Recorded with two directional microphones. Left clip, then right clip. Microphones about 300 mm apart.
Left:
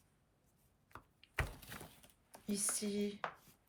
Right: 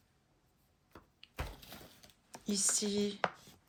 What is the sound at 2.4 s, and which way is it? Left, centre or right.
Speech, centre.